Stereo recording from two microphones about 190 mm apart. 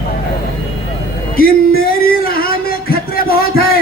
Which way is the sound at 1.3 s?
50° left (ahead or behind).